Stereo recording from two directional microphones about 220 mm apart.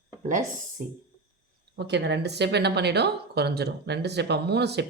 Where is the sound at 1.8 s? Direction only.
50° right (ahead or behind).